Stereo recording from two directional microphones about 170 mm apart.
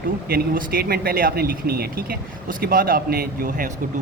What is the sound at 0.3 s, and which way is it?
Speech, 60° right (ahead or behind).